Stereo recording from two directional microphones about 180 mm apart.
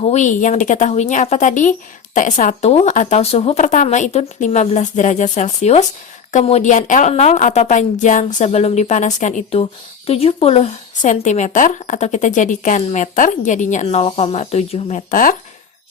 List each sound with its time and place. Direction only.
0.0 s a woman's voice: 40° left (ahead or behind)